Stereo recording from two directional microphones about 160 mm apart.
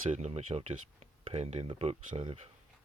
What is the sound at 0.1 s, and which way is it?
Speech, 40° right (ahead or behind).